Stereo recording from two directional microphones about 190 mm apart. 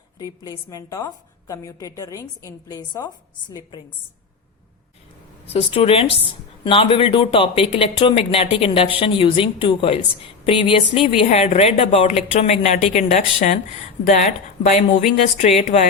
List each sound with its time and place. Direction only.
0.2 s a woman's voice: 20° left (ahead or behind)
5.5 s a woman's voice: 30° left (ahead or behind)